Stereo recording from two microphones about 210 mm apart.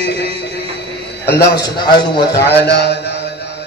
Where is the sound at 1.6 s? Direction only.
20° left (ahead or behind).